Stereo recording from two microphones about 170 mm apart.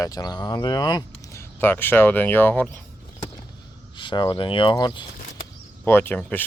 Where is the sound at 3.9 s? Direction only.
30° left (ahead or behind).